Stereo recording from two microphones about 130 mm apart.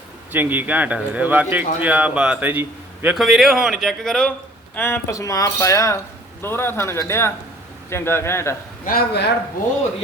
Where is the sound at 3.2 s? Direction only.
Centre (ahead or behind).